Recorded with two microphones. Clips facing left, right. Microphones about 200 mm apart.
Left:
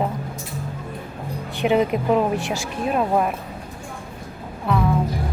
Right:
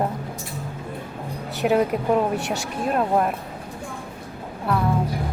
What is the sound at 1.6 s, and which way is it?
A woman's voice, 5° left (ahead or behind).